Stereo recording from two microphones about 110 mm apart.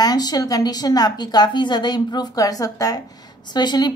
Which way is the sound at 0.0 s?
35° left (ahead or behind).